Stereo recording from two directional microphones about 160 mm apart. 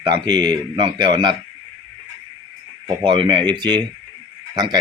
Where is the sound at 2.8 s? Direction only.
30° right (ahead or behind).